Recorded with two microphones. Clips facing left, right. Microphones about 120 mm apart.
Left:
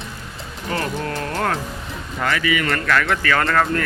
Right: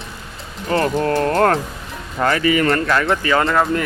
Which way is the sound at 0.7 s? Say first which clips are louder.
Right 8 dB; 40° right (ahead or behind).